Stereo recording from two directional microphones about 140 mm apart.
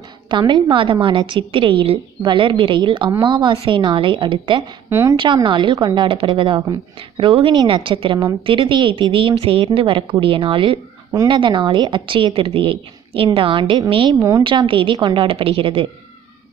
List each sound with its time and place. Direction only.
0.3 s a woman's voice: 35° right (ahead or behind)
4.8 s a woman's voice: 15° right (ahead or behind)
5.2 s a woman's voice: 35° right (ahead or behind)